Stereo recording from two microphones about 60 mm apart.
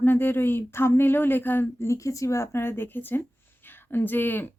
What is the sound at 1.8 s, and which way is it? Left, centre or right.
Speech, left.